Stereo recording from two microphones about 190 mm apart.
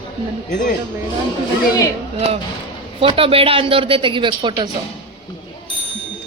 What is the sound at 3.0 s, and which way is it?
A woman's voice, 30° right (ahead or behind).